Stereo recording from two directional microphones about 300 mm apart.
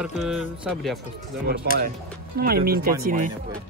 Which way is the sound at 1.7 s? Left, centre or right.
Right.